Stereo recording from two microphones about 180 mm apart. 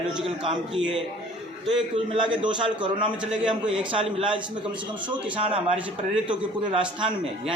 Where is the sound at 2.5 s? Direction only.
25° right (ahead or behind).